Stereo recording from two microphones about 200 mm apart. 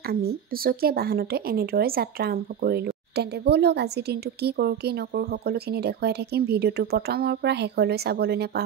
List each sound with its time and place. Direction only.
0.0 s a woman's voice: 50° right (ahead or behind)